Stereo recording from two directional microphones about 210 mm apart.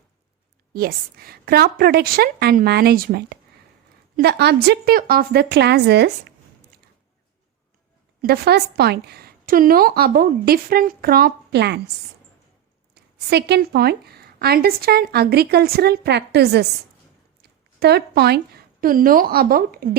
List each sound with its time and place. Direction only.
0.7 s a woman's voice: 45° right (ahead or behind)
8.2 s a woman's voice: 50° right (ahead or behind)
12.9 s a woman's voice: 50° right (ahead or behind)
17.7 s a woman's voice: 50° right (ahead or behind)